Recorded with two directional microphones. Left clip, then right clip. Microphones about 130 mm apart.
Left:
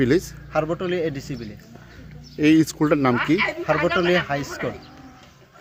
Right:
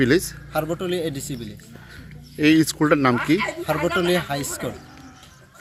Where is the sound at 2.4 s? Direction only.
10° left (ahead or behind).